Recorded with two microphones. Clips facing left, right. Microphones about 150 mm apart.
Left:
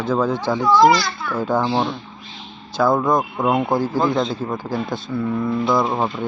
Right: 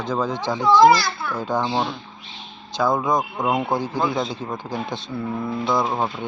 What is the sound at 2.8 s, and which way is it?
Speech, 5° left (ahead or behind).